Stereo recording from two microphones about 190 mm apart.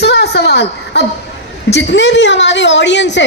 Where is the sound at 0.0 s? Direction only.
60° left (ahead or behind).